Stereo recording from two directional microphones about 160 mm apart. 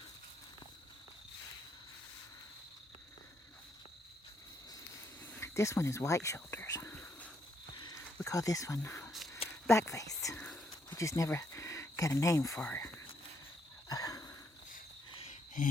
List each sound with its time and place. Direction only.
5.2 s speech: 15° left (ahead or behind)
7.8 s music: 20° left (ahead or behind)
9.6 s whispering: 20° left (ahead or behind)
10.8 s speech: 20° left (ahead or behind)
13.8 s sniff: 25° left (ahead or behind)
15.3 s a sound: 55° left (ahead or behind)